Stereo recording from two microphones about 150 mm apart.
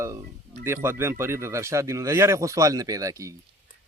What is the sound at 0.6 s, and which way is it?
A man's voice, 15° right (ahead or behind).